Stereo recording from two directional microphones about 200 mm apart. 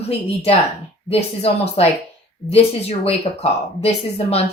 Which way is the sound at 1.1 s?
30° left (ahead or behind).